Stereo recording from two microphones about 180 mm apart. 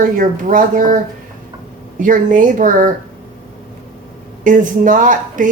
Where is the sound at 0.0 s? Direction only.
45° right (ahead or behind).